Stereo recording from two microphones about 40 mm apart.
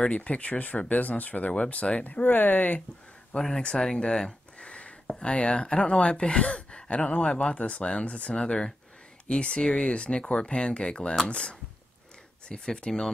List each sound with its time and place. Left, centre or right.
0.1 s speech: left
1.5 s speech: left
2.0 s speech: left
3.3 s speech: centre
3.8 s a sound: centre
5.2 s speech: left